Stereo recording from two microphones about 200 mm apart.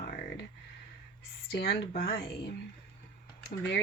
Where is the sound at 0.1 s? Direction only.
50° left (ahead or behind).